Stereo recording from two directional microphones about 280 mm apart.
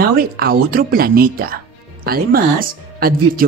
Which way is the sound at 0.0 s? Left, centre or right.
Right.